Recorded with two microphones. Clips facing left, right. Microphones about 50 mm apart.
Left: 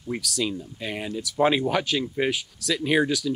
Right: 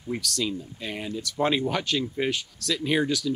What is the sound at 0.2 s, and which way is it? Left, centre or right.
Speech, centre.